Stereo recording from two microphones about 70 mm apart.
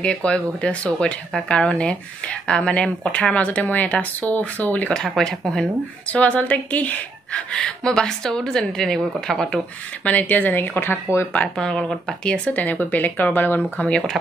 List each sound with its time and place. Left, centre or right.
0.0 s speech: centre
4.9 s speech: centre
6.1 s speech: centre
7.5 s speech: centre
10.0 s speech: left
11.4 s speech: centre; by 13.7 s left
13.7 s speech: centre